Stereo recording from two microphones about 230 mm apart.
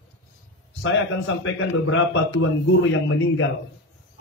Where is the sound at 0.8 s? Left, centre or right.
Left.